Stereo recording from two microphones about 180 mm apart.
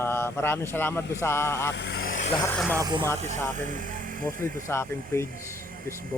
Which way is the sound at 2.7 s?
20° right (ahead or behind).